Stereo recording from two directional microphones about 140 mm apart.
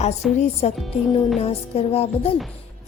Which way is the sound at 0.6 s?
45° left (ahead or behind).